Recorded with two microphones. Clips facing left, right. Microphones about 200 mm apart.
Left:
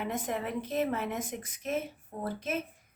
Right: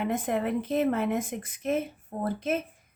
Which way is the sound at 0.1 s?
55° right (ahead or behind).